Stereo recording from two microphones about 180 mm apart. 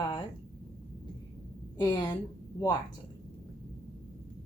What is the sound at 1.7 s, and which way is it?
Speech, 20° left (ahead or behind).